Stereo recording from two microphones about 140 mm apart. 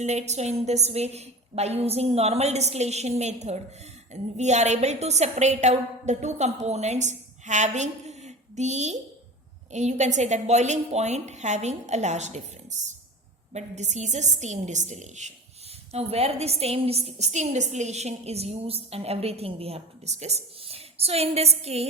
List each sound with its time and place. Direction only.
0.0 s a woman's voice: 55° right (ahead or behind)
13.5 s a woman's voice: 55° right (ahead or behind)